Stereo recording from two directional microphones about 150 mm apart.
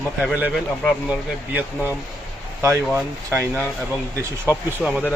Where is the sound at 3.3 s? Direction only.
15° right (ahead or behind).